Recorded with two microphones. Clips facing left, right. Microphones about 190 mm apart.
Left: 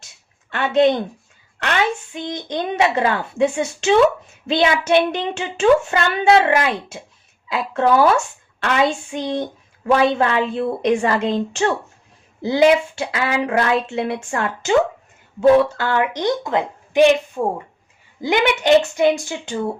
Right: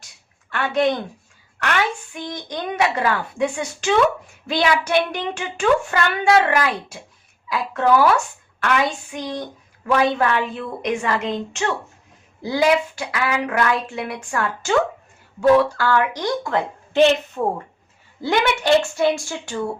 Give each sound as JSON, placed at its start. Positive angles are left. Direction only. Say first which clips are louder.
{"t": 0.5, "sound": "a child's voice", "louder": "left 4 dB", "side_deg": 25}
{"t": 2.1, "sound": "a child's voice", "louder": "left 4 dB", "side_deg": 25}